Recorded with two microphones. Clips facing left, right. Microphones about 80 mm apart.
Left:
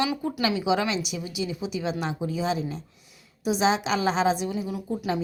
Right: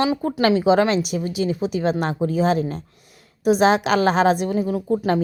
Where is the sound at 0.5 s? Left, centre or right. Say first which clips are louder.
Right 10 dB; right.